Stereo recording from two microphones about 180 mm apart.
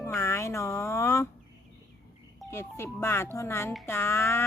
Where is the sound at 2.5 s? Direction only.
15° left (ahead or behind).